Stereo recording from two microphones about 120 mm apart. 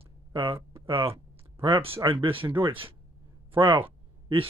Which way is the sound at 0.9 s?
50° right (ahead or behind).